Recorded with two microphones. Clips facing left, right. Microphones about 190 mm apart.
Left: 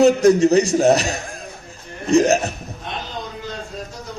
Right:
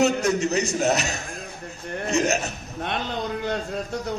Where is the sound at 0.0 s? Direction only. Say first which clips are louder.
Left 8 dB; 35° left (ahead or behind).